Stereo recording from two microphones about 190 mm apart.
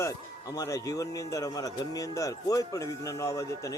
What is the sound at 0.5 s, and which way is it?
A man's voice, 15° left (ahead or behind).